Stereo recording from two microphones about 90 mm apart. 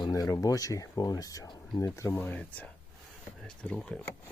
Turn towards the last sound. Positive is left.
turn(degrees=10)  # may be behind; listen again after turning